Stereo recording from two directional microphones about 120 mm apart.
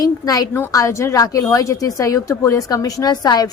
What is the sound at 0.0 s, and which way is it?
Speech, 30° left (ahead or behind).